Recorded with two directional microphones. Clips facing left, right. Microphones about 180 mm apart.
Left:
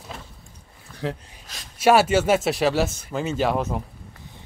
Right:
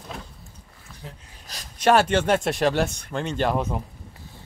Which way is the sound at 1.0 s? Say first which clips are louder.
Left 14 dB; 90° left.